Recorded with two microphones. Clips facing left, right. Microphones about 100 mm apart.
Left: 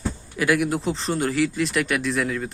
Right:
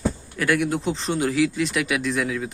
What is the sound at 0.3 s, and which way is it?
Speech, 5° left (ahead or behind).